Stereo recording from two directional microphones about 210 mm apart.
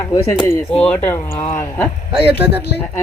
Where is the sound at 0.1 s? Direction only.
20° left (ahead or behind).